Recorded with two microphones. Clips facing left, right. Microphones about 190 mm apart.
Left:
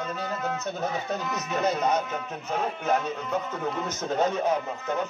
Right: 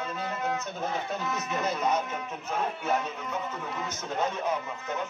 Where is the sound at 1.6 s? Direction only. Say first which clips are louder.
Left 4 dB; 40° left (ahead or behind).